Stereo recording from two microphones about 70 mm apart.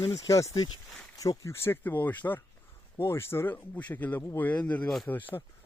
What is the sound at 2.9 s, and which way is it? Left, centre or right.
Speech, left.